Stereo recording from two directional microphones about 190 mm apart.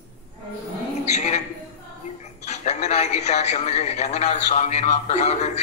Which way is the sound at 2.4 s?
35° left (ahead or behind).